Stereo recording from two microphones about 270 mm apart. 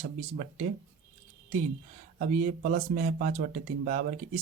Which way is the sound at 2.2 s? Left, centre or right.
Right.